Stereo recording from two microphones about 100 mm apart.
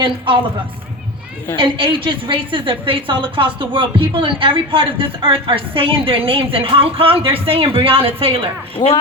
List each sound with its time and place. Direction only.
1.5 s a woman's voice: 55° right (ahead or behind)
8.8 s speech: 40° left (ahead or behind)